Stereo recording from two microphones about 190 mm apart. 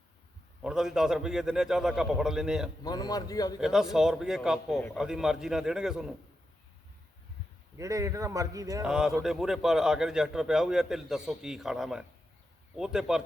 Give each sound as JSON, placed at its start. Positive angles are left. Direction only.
{"t": 0.6, "sound": "a man's voice", "side_deg": -5}
{"t": 2.8, "sound": "a man's voice", "side_deg": 20}
{"t": 3.6, "sound": "a man's voice", "side_deg": -5}
{"t": 7.8, "sound": "a man's voice", "side_deg": -15}
{"t": 8.8, "sound": "a man's voice", "side_deg": -5}